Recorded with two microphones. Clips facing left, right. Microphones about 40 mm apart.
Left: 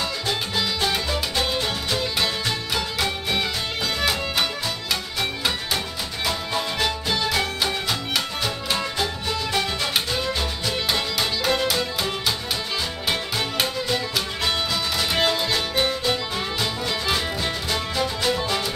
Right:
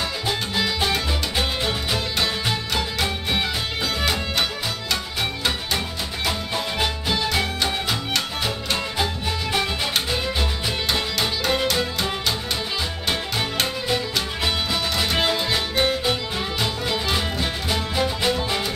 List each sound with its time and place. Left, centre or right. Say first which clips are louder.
0.3 s music: right 2 dB; centre
6.2 s music: left 1 dB; centre
8.9 s music: right 1 dB; centre
10.9 s music: right 1 dB; centre